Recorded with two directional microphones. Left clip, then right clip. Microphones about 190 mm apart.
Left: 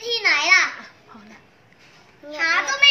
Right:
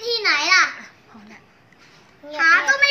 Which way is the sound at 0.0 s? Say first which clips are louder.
Even; centre (ahead or behind).